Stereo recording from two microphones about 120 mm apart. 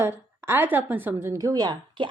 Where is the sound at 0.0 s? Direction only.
20° right (ahead or behind).